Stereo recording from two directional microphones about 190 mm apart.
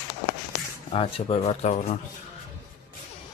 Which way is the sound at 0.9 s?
30° left (ahead or behind).